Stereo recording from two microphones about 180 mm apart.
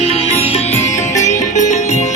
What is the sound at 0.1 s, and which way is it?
Music, 35° left (ahead or behind).